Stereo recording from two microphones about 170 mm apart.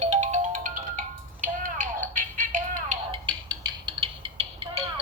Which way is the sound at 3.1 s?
30° right (ahead or behind).